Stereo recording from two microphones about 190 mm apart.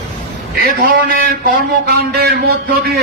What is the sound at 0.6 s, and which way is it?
A man's voice, 50° right (ahead or behind).